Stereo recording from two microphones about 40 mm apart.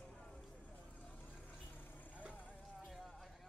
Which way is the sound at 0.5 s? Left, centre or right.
Left.